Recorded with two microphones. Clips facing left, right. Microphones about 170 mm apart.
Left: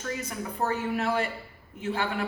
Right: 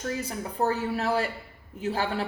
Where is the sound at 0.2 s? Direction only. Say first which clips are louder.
Right 3 dB; 35° right (ahead or behind).